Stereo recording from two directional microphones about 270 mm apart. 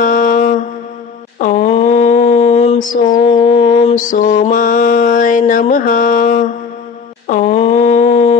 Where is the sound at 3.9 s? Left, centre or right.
Left.